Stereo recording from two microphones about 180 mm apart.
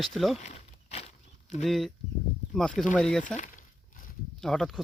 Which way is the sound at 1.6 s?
Centre (ahead or behind).